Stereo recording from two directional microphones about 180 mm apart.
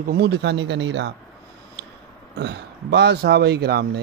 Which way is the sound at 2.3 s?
70° right (ahead or behind).